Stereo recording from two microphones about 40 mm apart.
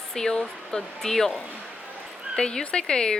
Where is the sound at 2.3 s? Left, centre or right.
Left.